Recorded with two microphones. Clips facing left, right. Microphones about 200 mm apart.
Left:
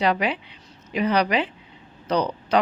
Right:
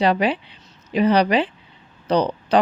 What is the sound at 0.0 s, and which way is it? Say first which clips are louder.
A woman's voice: right 4 dB; 30° right (ahead or behind).